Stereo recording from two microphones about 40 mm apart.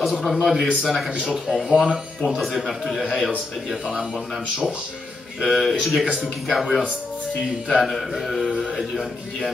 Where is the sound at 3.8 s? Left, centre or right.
Centre.